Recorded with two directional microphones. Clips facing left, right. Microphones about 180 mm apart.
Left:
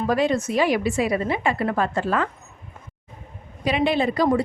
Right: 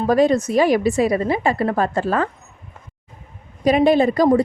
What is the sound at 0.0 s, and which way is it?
A woman's voice, 40° right (ahead or behind).